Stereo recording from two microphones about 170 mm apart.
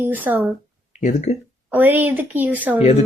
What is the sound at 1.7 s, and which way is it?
A child's voice, 10° right (ahead or behind).